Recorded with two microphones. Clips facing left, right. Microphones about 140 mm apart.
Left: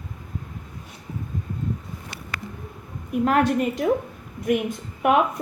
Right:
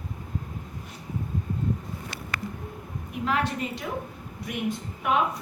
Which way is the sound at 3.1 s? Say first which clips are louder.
Left 8 dB; 50° left (ahead or behind).